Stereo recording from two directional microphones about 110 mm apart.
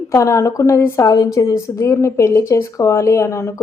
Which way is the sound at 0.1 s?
25° left (ahead or behind).